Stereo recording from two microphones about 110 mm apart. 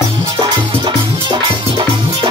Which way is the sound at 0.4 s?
45° right (ahead or behind).